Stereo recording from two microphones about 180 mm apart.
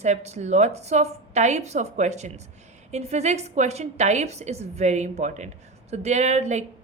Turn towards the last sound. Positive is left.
turn(degrees=-40)  # may be behind; listen again after turning